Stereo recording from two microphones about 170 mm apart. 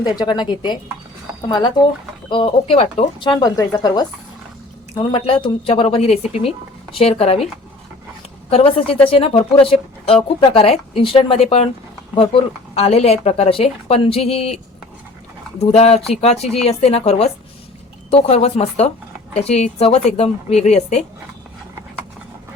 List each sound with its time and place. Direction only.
0.0 s speech: 25° left (ahead or behind)
3.4 s speech: 20° left (ahead or behind)
4.9 s speech: 30° left (ahead or behind)
8.4 s speech: 35° left (ahead or behind)